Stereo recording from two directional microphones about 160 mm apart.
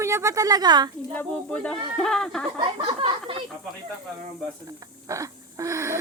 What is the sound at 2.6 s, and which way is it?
Speech, 30° right (ahead or behind).